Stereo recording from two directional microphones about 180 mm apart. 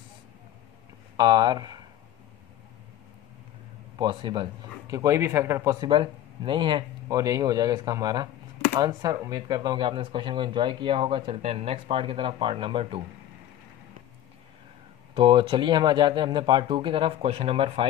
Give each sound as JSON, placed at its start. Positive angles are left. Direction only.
{"t": 1.1, "sound": "speech", "side_deg": -25}
{"t": 4.0, "sound": "a man's voice", "side_deg": -25}
{"t": 5.9, "sound": "speech", "side_deg": -25}
{"t": 15.1, "sound": "speech", "side_deg": -25}